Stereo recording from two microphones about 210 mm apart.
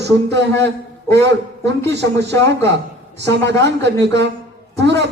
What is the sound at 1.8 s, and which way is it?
A man's voice, 55° right (ahead or behind).